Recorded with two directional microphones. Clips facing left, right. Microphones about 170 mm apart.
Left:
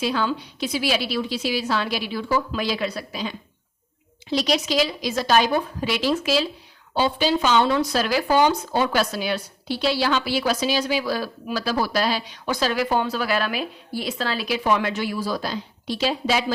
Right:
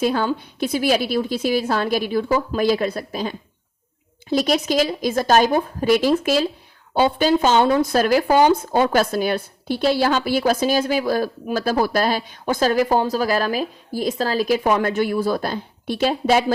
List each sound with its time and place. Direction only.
0.0 s speech: 50° right (ahead or behind)